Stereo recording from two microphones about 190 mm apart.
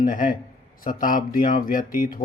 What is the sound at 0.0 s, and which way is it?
Mantra, 45° left (ahead or behind).